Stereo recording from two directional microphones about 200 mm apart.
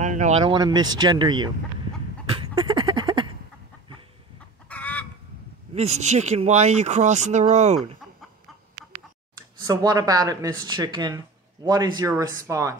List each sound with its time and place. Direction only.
0.0 s speech: 40° right (ahead or behind); by 1.5 s 20° right (ahead or behind)
2.2 s a sound: 25° right (ahead or behind)
4.6 s chicken: 5° left (ahead or behind)
5.8 s speech: 35° right (ahead or behind)
9.6 s speech: 20° right (ahead or behind)